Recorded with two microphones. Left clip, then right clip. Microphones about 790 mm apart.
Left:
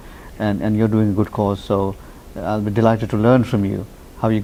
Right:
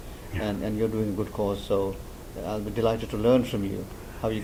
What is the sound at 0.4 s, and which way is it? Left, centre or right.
Speech, left.